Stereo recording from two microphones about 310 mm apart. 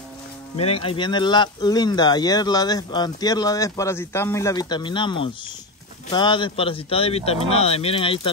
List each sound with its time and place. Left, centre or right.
0.6 s speech: centre